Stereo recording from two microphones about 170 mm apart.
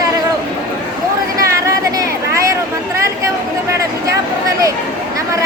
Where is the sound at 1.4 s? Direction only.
20° right (ahead or behind).